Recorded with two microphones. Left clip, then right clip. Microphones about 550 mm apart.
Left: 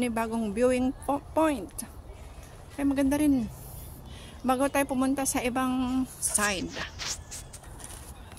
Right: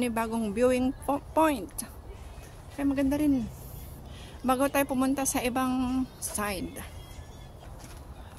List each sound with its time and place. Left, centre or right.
0.0 s speech: right
4.5 s speech: right